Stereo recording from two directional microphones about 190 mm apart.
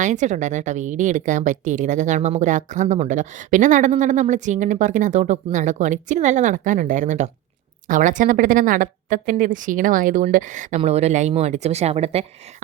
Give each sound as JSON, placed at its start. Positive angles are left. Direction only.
{"t": 0.0, "sound": "a woman's voice", "side_deg": -40}